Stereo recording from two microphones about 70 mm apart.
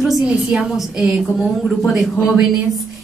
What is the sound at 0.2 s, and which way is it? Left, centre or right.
A woman's voice, centre.